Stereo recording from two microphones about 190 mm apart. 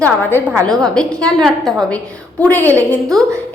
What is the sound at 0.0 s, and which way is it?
A woman's voice, 10° left (ahead or behind).